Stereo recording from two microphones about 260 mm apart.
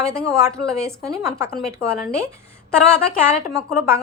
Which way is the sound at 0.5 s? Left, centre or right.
Centre.